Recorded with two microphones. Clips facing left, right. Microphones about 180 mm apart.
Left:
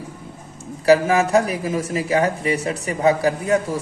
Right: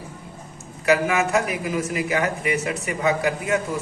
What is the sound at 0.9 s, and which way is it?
A man's voice, 35° left (ahead or behind).